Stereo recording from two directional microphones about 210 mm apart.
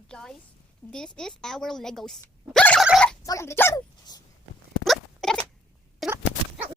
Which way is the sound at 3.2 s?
15° left (ahead or behind).